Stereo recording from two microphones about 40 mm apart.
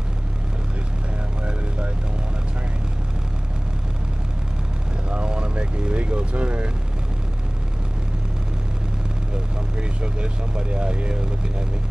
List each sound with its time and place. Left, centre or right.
5.1 s vehicle: right
9.8 s speech: right